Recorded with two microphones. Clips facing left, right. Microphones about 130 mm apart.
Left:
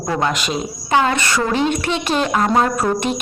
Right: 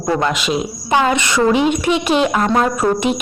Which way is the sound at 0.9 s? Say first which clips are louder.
Right 1 dB; 15° right (ahead or behind).